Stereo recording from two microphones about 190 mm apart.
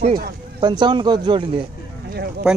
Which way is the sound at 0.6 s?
25° right (ahead or behind).